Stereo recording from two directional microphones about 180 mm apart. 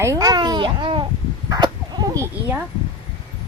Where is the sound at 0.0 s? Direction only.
20° right (ahead or behind).